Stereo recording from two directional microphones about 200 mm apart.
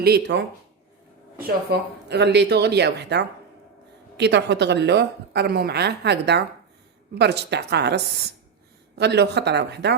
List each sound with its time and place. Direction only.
0.0 s a woman's voice: 55° right (ahead or behind)